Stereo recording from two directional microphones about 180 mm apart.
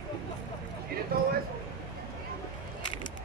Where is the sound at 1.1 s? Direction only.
55° right (ahead or behind).